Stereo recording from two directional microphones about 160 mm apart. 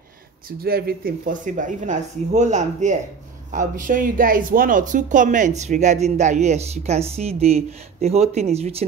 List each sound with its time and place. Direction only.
0.5 s speech: 70° right (ahead or behind); by 8.8 s 40° right (ahead or behind)